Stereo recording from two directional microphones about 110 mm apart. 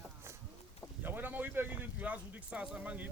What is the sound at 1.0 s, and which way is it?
Speech, 15° right (ahead or behind).